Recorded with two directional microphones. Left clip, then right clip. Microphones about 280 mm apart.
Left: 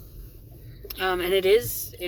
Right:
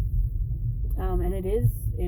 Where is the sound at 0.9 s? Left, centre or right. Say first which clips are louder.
Left 9 dB; left.